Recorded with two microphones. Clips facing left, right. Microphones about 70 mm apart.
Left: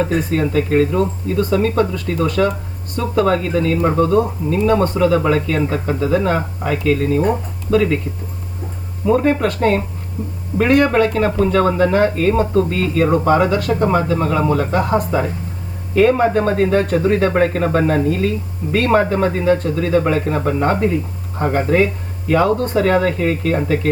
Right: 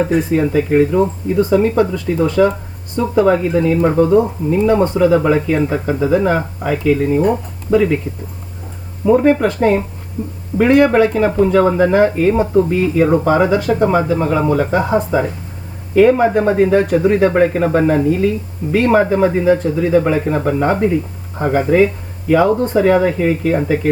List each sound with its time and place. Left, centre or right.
0.3 s speech: centre
9.0 s speech: centre
16.0 s speech: centre